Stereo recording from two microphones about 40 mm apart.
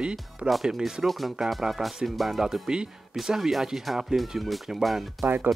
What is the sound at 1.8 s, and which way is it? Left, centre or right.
Speech, centre.